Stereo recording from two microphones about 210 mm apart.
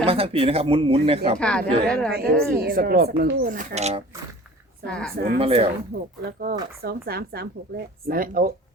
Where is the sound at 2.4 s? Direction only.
45° right (ahead or behind).